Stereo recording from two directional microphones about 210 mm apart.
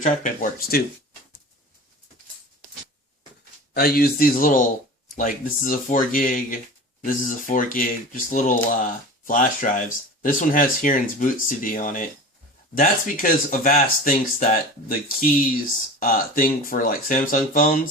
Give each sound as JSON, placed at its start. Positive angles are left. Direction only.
{"t": 0.0, "sound": "speech", "side_deg": 35}
{"t": 3.8, "sound": "speech", "side_deg": 45}